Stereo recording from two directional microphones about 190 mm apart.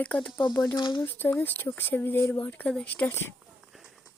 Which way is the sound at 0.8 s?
25° left (ahead or behind).